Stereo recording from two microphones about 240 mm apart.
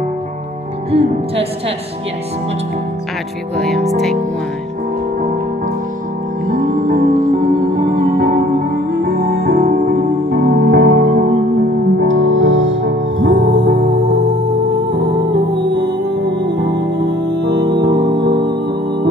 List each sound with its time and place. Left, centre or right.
3.5 s speech: centre
6.4 s music: right